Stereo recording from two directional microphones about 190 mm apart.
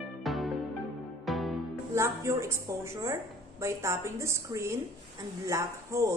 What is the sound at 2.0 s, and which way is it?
A woman's voice, 15° right (ahead or behind).